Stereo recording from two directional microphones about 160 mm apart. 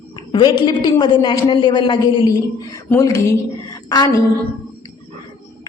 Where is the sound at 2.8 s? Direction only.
15° left (ahead or behind).